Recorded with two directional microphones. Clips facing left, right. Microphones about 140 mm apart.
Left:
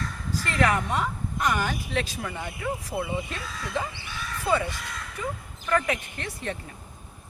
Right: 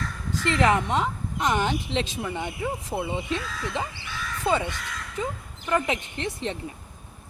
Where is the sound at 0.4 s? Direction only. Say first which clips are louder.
Right 3 dB; 20° right (ahead or behind).